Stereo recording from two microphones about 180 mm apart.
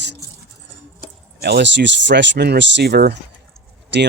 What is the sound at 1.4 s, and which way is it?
Speech, 65° right (ahead or behind).